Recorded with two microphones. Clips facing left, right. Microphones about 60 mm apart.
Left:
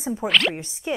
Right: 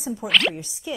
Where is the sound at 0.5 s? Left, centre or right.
Left.